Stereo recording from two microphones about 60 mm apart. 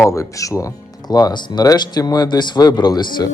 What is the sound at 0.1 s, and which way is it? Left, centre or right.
Speech, left.